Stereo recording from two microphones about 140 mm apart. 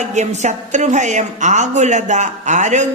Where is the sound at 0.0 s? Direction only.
55° right (ahead or behind).